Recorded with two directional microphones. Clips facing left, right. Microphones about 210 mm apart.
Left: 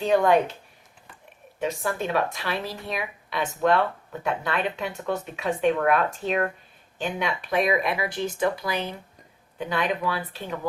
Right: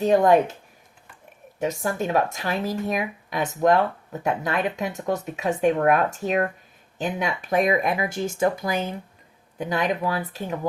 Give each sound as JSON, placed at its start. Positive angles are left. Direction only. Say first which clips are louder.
{"t": 0.0, "sound": "speech", "louder": "right 3 dB", "side_deg": -40}
{"t": 1.5, "sound": "speech", "louder": "right 2 dB", "side_deg": -45}